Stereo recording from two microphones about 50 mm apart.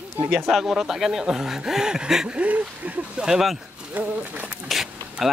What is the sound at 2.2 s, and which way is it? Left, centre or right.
Speech, right.